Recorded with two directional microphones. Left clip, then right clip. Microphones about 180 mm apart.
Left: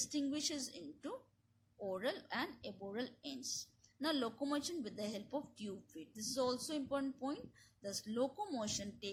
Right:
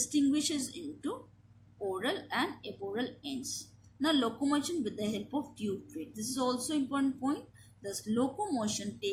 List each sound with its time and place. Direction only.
0.1 s a woman's voice: 50° left (ahead or behind)